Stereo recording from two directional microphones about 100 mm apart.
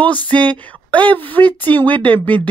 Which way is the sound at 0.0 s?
15° left (ahead or behind).